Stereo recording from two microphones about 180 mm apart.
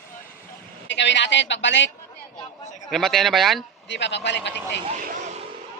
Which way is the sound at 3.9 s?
75° left (ahead or behind).